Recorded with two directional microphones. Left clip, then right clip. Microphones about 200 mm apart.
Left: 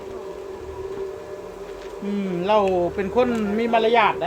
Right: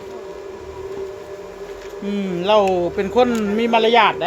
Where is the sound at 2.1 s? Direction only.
55° right (ahead or behind).